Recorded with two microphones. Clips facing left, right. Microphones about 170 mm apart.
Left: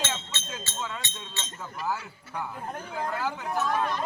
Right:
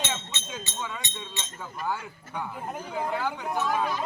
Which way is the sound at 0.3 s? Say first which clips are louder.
Even; 15° right (ahead or behind).